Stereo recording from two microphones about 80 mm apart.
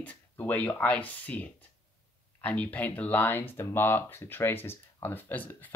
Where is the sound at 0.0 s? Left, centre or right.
Left.